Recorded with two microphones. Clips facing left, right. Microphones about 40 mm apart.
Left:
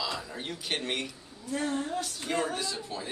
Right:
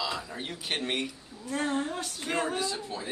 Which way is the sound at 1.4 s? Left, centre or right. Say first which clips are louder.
Right 1 dB; right.